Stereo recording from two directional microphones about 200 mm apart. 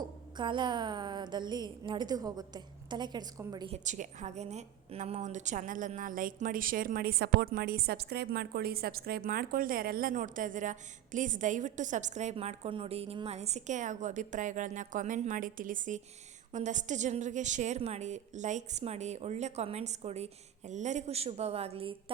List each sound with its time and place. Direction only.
0.3 s a woman's voice: 25° right (ahead or behind)
3.8 s a woman's voice: 40° right (ahead or behind)